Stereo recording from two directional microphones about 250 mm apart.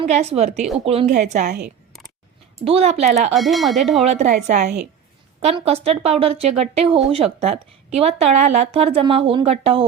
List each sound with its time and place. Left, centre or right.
0.1 s speech: right
2.6 s speech: right
3.3 s speech: centre
4.0 s speech: right